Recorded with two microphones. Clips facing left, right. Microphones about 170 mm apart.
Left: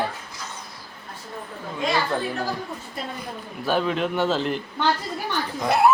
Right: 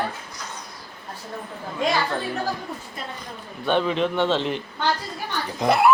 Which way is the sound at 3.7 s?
5° left (ahead or behind).